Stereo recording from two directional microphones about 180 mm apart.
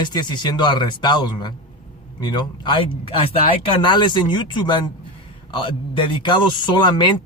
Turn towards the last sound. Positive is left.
turn(degrees=25)  # may be behind; listen again after turning